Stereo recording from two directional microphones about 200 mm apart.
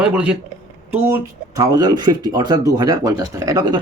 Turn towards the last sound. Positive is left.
turn(degrees=-20)  # may be behind; listen again after turning